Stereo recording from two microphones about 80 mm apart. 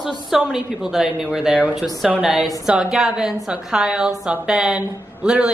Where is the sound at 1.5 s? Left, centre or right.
Centre.